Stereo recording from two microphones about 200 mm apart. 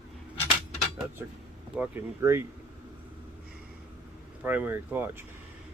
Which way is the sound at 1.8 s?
10° right (ahead or behind).